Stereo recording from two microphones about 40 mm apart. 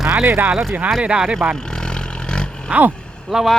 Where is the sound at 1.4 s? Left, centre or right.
Right.